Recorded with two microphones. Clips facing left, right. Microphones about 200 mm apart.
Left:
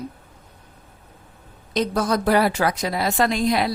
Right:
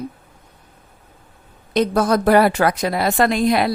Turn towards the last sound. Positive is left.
turn(degrees=-60)  # may be behind; listen again after turning